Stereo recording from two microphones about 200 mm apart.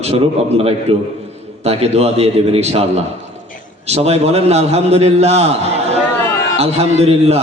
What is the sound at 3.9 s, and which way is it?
A man's voice, 30° right (ahead or behind).